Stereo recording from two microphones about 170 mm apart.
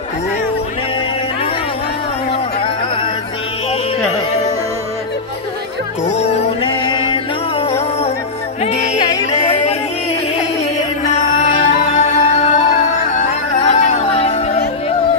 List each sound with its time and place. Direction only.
6.0 s music: 35° left (ahead or behind)
11.5 s music: 40° left (ahead or behind)